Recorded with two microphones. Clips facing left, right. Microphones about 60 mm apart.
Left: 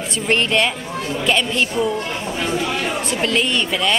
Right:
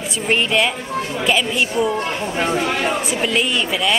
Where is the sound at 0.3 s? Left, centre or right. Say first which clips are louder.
Even; centre.